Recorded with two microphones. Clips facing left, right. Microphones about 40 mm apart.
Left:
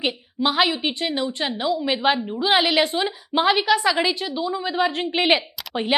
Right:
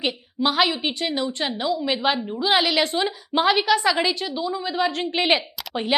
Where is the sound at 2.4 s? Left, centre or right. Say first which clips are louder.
Left 1 dB; centre.